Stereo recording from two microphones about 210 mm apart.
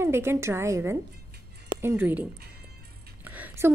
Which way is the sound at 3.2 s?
10° right (ahead or behind).